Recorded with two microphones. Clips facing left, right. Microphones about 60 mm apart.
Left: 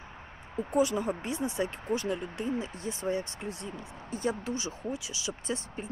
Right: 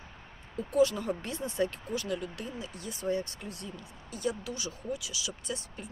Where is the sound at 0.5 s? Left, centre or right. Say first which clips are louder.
Right 1 dB; left.